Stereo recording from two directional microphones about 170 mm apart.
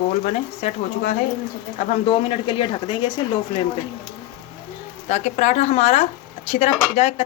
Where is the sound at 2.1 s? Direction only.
30° left (ahead or behind).